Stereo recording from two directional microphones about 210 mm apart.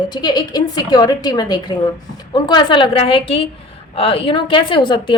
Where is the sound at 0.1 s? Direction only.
20° left (ahead or behind).